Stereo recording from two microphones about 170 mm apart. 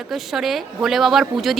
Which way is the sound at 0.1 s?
Centre (ahead or behind).